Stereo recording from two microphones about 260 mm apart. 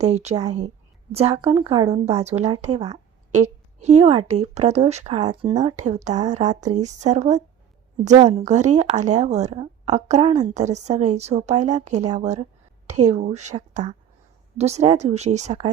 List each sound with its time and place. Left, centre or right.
0.0 s a woman's voice: right